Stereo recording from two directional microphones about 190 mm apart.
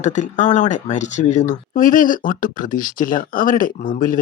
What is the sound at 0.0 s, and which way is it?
Speech, 40° left (ahead or behind).